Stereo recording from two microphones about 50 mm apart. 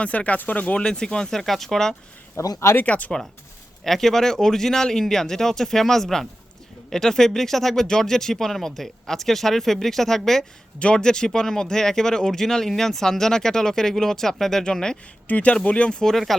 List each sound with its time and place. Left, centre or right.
0.0 s speech: left
0.8 s speech: centre
2.3 s speech: left
2.8 s speech: left
3.8 s speech: centre
10.8 s speech: centre
15.3 s speech: left
16.1 s speech: centre